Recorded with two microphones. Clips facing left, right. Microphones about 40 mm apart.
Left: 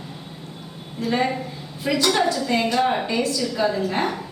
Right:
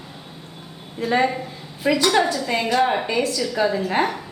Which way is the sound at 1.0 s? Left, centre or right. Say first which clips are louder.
Right 2 dB; centre.